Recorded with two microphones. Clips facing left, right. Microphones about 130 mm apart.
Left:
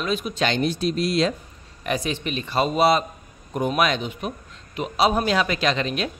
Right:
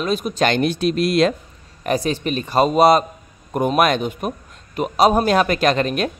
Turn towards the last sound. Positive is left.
turn(degrees=-50)  # may be behind; listen again after turning